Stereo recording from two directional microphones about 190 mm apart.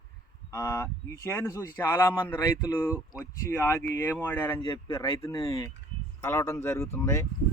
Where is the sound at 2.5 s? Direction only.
20° left (ahead or behind).